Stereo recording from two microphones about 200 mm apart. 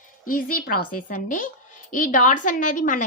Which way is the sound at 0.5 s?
45° left (ahead or behind).